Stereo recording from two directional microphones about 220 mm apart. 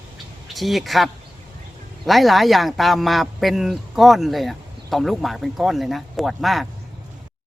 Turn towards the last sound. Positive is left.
turn(degrees=0)  # may be behind; listen again after turning